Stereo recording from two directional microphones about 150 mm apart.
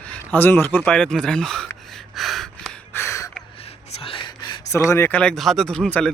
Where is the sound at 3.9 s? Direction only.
40° left (ahead or behind); by 6.1 s 10° left (ahead or behind).